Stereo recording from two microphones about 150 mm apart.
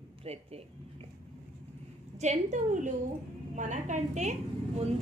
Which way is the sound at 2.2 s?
50° right (ahead or behind).